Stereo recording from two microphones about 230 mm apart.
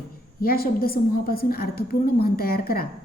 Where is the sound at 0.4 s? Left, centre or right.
Left.